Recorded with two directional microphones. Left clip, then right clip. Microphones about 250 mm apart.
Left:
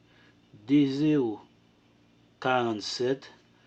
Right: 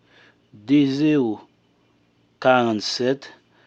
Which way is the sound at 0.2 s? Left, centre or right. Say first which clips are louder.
Right 7 dB; right.